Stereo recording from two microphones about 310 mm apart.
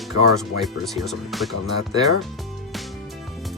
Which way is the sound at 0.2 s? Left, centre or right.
Left.